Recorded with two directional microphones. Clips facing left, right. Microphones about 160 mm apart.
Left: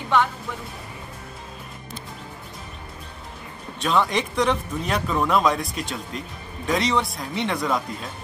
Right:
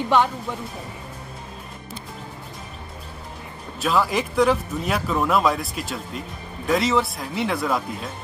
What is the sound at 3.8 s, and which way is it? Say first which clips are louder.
Speech: even; 5° right (ahead or behind).